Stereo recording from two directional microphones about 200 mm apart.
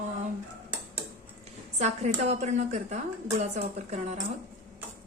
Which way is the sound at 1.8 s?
35° right (ahead or behind).